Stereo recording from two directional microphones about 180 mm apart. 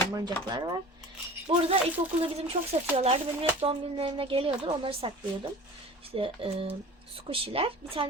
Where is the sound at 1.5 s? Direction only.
30° right (ahead or behind).